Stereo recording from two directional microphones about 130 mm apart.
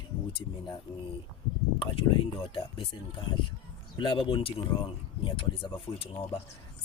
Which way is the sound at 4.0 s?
40° left (ahead or behind).